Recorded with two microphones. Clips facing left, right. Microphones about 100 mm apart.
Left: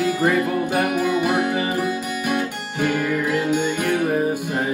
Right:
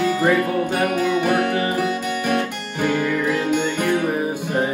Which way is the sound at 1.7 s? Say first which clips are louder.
Right 2 dB; 60° right (ahead or behind).